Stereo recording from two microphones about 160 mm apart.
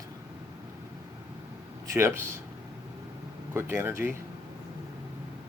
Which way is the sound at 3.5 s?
15° right (ahead or behind).